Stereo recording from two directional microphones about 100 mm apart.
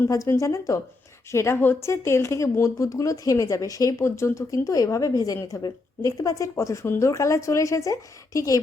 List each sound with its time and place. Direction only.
0.1 s speech: 35° left (ahead or behind)